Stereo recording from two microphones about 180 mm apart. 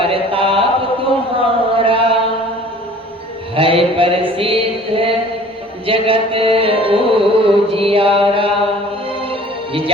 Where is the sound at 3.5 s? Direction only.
30° right (ahead or behind).